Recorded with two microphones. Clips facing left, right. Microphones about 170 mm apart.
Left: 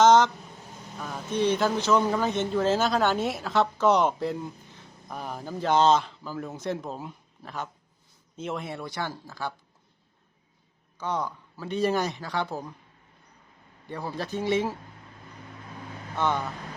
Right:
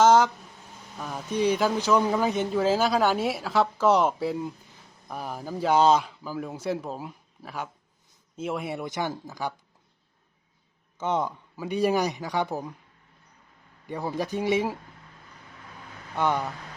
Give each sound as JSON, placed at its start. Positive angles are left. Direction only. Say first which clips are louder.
{"t": 0.0, "sound": "a sound", "louder": "even", "side_deg": -5}
{"t": 0.9, "sound": "speech", "louder": "even", "side_deg": -10}
{"t": 10.9, "sound": "speech", "louder": "right 3 dB", "side_deg": -25}
{"t": 13.8, "sound": "speech", "louder": "right 4 dB", "side_deg": -15}
{"t": 16.1, "sound": "speech", "louder": "right 1 dB", "side_deg": -10}